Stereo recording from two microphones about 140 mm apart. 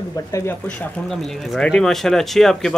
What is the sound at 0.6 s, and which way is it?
Speech, 5° left (ahead or behind).